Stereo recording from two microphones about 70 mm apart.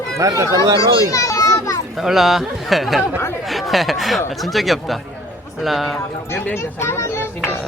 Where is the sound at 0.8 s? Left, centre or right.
Left.